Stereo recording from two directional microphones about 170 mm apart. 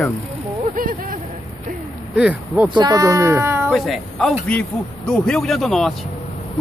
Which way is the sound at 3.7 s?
Centre (ahead or behind).